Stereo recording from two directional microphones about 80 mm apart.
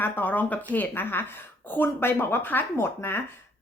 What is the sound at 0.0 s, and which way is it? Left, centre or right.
Speech, left.